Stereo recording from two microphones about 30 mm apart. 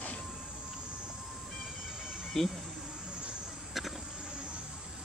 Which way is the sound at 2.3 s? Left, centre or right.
Centre.